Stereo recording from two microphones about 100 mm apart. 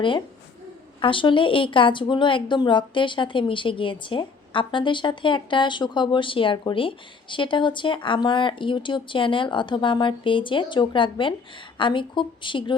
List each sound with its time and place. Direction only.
1.0 s a woman's voice: 60° left (ahead or behind)